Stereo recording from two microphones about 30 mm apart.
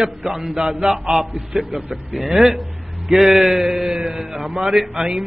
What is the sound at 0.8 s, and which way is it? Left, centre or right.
Speech, right.